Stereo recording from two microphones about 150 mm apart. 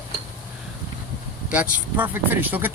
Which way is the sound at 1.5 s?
10° right (ahead or behind).